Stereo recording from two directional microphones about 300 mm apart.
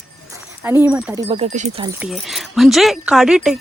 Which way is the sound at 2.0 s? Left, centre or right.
Centre.